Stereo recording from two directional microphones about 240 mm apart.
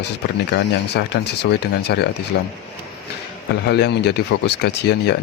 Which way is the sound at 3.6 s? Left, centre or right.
Left.